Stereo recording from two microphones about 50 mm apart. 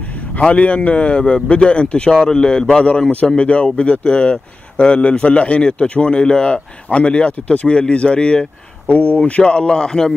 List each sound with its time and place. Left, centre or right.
0.4 s speech: left